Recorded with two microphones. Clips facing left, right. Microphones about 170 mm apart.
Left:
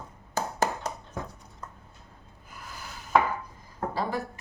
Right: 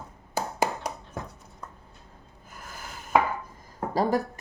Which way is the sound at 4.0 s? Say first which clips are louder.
Right 7 dB; 40° right (ahead or behind).